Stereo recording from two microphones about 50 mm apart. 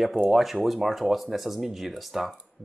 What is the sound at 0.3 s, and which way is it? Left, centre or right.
A man's voice, centre.